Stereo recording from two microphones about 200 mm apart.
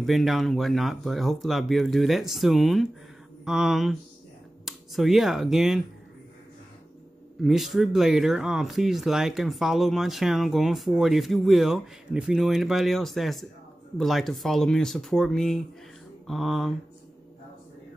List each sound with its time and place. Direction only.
0.0 s speech: centre (ahead or behind)
7.4 s speech: centre (ahead or behind)